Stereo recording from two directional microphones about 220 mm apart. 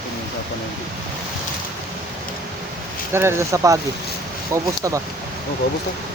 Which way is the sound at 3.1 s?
10° right (ahead or behind).